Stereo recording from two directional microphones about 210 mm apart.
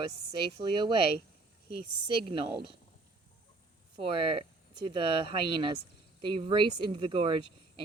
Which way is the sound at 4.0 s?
25° right (ahead or behind).